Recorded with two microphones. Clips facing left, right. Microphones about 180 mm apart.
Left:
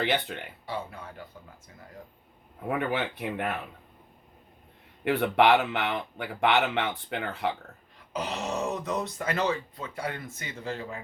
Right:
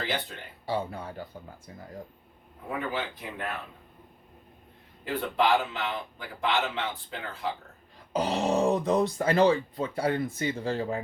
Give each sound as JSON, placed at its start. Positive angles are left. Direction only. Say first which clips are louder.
{"t": 0.6, "sound": "speech", "louder": "right 8 dB", "side_deg": -35}
{"t": 2.6, "sound": "a man's voice", "louder": "left 4 dB", "side_deg": 65}
{"t": 5.0, "sound": "a man's voice", "louder": "left 4 dB", "side_deg": 70}
{"t": 8.1, "sound": "speech", "louder": "right 6 dB", "side_deg": -30}